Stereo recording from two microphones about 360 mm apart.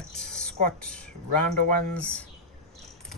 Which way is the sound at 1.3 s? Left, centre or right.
Left.